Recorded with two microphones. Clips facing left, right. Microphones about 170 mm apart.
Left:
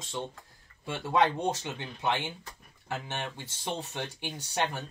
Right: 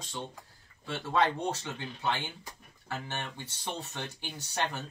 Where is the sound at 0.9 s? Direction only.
15° left (ahead or behind).